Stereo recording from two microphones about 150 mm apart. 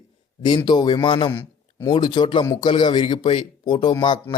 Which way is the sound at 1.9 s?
30° left (ahead or behind).